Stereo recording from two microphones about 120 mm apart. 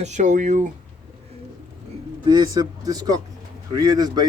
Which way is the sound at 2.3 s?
30° right (ahead or behind).